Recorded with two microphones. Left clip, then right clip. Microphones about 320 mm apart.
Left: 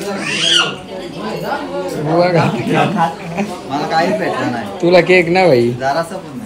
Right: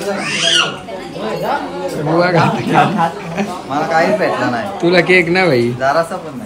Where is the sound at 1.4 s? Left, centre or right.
Centre.